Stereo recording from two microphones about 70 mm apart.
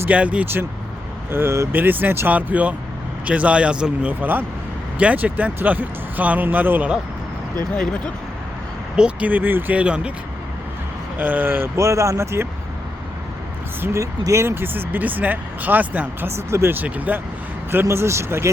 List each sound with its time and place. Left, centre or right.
0.1 s speech: centre
1.3 s speech: right; by 4.1 s centre
4.1 s speech: right
9.0 s speech: centre
9.7 s speech: centre
11.2 s speech: right
13.8 s speech: right
14.4 s speech: right
16.3 s speech: right
16.7 s speech: right
17.8 s speech: right